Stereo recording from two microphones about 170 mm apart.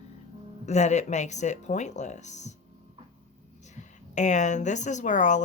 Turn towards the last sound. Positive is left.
turn(degrees=45)  # may be behind; listen again after turning